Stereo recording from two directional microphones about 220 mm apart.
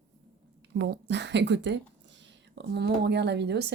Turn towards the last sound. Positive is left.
turn(degrees=-50)  # may be behind; listen again after turning